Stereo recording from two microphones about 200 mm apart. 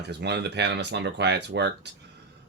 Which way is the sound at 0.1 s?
55° right (ahead or behind).